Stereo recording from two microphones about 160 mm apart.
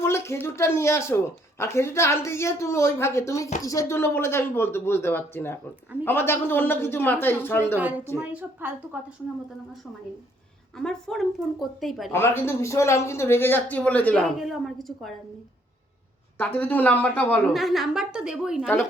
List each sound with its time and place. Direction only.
0.0 s speech: 15° left (ahead or behind)
7.8 s a woman's voice: 10° right (ahead or behind)
10.8 s a woman's voice: 5° left (ahead or behind)
12.1 s speech: 15° left (ahead or behind)
16.4 s speech: 10° left (ahead or behind)
17.5 s a woman's voice: centre (ahead or behind)